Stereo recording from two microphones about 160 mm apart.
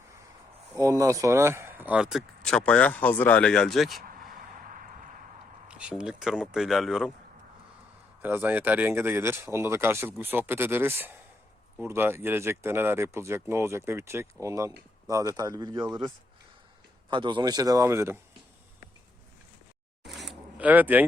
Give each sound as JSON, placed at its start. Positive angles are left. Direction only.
{"t": 0.8, "sound": "speech", "side_deg": -20}
{"t": 5.6, "sound": "speech", "side_deg": -5}
{"t": 8.2, "sound": "speech", "side_deg": -15}
{"t": 20.1, "sound": "a sound", "side_deg": 0}